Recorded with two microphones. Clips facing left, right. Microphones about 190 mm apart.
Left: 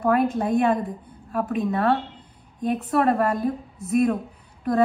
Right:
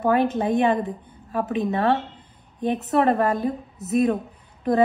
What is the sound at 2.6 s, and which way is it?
A woman's voice, centre (ahead or behind).